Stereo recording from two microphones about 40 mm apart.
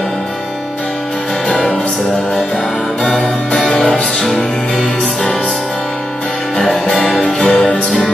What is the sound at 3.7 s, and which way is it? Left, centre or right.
Music, left.